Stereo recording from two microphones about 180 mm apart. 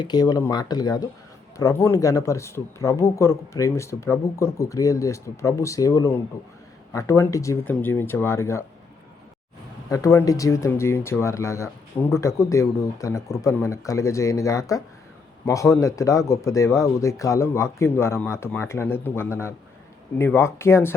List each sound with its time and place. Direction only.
0.0 s speech: 20° left (ahead or behind)
9.9 s speech: 20° left (ahead or behind)